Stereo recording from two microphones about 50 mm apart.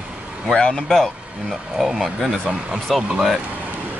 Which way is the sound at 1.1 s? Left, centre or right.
Right.